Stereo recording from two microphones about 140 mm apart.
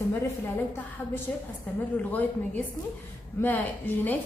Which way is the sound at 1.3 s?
10° left (ahead or behind).